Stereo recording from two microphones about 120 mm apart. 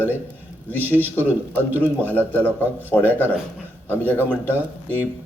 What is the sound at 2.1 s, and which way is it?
A man's voice, 15° left (ahead or behind).